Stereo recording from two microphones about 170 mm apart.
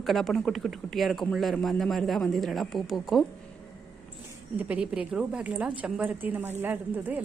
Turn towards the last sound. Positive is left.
turn(degrees=-10)  # may be behind; listen again after turning